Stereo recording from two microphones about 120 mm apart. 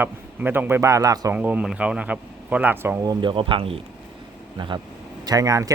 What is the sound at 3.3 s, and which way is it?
Speech, 50° right (ahead or behind).